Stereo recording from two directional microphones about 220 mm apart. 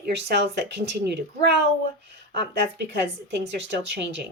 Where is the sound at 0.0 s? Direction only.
50° right (ahead or behind).